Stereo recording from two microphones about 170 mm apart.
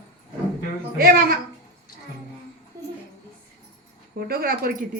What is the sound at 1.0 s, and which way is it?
Speech, 60° right (ahead or behind).